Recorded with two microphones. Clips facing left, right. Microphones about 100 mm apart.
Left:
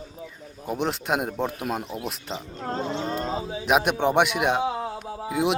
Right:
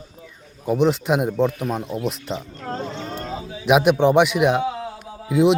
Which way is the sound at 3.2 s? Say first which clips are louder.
Left 2 dB; 30° left (ahead or behind).